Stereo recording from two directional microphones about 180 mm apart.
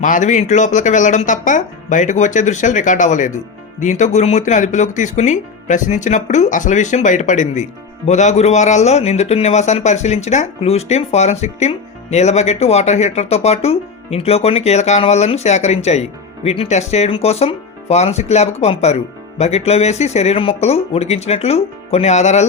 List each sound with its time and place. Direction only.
0.0 s speech: 45° left (ahead or behind)